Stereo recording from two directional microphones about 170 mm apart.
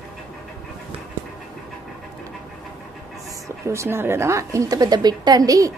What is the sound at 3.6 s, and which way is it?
A woman's voice, 15° right (ahead or behind).